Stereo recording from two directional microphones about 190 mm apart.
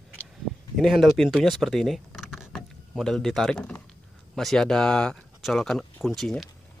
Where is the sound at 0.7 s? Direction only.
Centre (ahead or behind).